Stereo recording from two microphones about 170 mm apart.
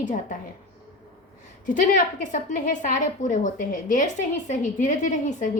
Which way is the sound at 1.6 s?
50° left (ahead or behind).